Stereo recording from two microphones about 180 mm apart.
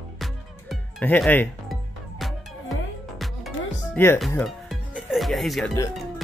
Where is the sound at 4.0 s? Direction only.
10° left (ahead or behind).